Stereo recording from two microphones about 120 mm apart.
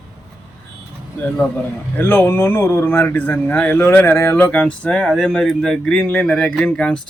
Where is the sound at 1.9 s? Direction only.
15° left (ahead or behind).